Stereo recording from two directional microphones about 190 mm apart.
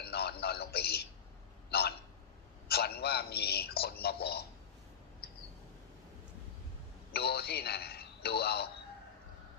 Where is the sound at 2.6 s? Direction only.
55° left (ahead or behind).